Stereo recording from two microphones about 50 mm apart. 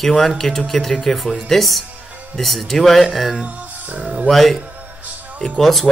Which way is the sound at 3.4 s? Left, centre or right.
Right.